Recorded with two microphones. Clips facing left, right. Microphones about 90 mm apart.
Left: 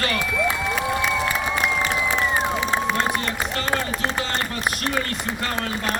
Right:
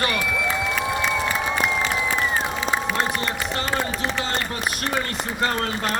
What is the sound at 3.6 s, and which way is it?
Run, 30° left (ahead or behind).